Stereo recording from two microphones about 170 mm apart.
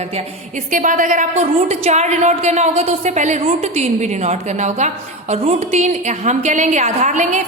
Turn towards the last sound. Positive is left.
turn(degrees=-45)  # may be behind; listen again after turning